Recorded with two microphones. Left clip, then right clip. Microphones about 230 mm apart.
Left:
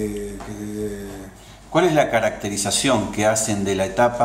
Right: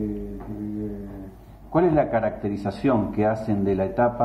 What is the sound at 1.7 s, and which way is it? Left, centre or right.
Speech, centre.